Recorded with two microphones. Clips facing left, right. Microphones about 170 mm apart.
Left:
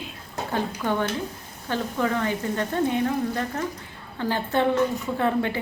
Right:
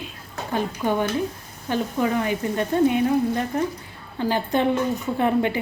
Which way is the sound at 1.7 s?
15° right (ahead or behind).